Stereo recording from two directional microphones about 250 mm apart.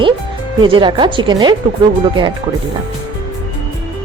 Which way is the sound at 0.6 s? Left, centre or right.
Centre.